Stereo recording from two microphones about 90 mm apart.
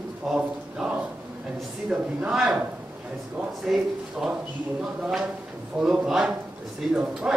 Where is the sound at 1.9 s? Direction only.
10° right (ahead or behind).